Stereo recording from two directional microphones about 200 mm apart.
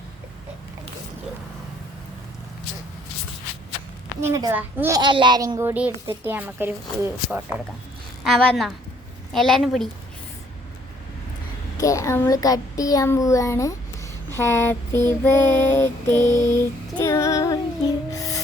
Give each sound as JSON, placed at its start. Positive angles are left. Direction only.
{"t": 4.2, "sound": "a child's voice", "side_deg": -15}
{"t": 11.8, "sound": "a child's voice", "side_deg": 15}
{"t": 18.1, "sound": "music", "side_deg": 15}